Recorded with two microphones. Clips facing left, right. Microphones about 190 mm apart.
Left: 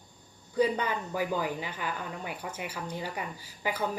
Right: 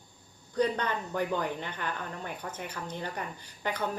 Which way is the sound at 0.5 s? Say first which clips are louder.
Left 1 dB; 5° left (ahead or behind).